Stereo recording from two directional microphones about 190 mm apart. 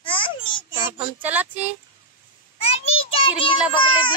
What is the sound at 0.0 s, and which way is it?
Babbling, 25° left (ahead or behind).